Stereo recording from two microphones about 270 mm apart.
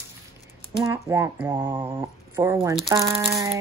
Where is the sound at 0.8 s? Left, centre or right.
Centre.